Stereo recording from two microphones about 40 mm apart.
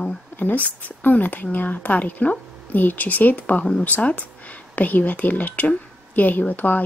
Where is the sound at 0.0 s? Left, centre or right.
Left.